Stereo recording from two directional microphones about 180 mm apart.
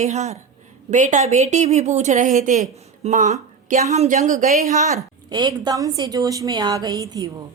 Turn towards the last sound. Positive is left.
turn(degrees=-20)  # may be behind; listen again after turning